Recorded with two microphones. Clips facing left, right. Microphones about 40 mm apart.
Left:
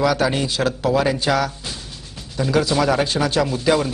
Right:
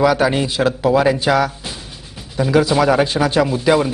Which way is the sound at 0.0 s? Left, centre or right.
Centre.